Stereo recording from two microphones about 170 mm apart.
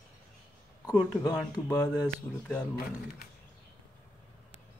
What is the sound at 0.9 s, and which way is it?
Speech, 20° left (ahead or behind).